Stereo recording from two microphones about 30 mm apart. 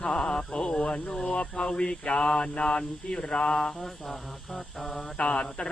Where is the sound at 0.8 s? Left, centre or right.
Left.